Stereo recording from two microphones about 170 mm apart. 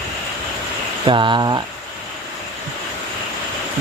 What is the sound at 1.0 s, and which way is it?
Speech, 30° right (ahead or behind).